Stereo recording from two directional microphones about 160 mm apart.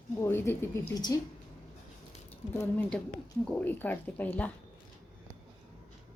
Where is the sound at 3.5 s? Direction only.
10° left (ahead or behind).